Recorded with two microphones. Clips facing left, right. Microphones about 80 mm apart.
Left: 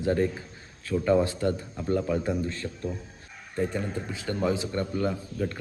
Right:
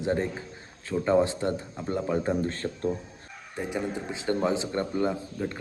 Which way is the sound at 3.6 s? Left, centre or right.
Centre.